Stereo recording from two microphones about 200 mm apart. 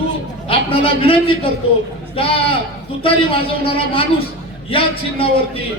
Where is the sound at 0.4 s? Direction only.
30° left (ahead or behind).